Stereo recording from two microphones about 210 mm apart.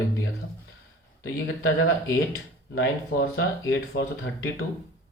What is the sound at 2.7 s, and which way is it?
Speech, 55° left (ahead or behind).